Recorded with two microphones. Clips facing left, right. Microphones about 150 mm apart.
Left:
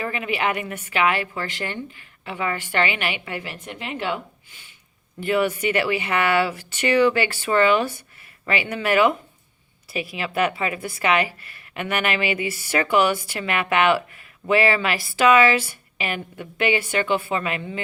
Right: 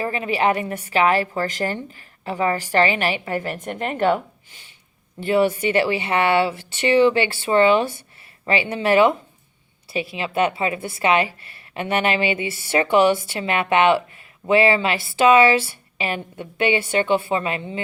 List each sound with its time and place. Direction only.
0.0 s a woman's voice: 35° right (ahead or behind)